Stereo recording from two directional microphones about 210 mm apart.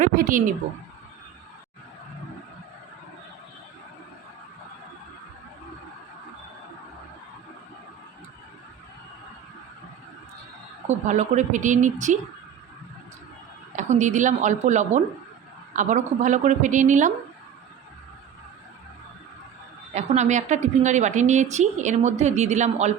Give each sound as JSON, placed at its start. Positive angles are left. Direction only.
{"t": 0.0, "sound": "a woman's voice", "side_deg": -40}
{"t": 10.8, "sound": "a woman's voice", "side_deg": -35}
{"t": 13.7, "sound": "a woman's voice", "side_deg": -35}
{"t": 19.9, "sound": "a woman's voice", "side_deg": -35}